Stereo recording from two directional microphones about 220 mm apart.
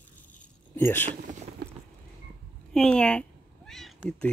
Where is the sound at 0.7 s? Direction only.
10° left (ahead or behind).